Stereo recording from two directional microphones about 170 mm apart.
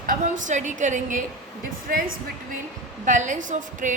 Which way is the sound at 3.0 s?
45° right (ahead or behind).